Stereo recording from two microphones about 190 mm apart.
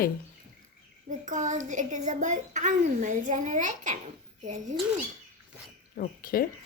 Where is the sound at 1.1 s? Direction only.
40° right (ahead or behind).